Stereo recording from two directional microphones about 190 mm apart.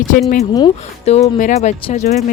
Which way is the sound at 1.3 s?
40° left (ahead or behind).